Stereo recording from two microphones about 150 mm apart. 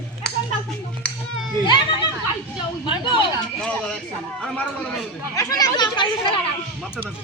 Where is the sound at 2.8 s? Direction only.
30° left (ahead or behind).